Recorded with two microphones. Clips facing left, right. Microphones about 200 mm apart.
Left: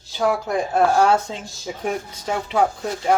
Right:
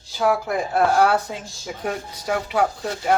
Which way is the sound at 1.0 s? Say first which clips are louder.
Left 1 dB; 25° left (ahead or behind).